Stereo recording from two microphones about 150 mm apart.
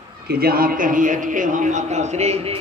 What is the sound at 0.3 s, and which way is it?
A man's voice, 85° right.